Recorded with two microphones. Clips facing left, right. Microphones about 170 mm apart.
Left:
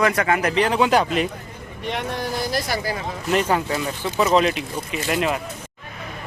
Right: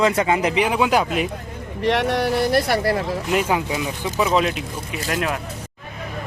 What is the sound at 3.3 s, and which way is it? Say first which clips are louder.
Speech: left 1 dB; 10° right (ahead or behind).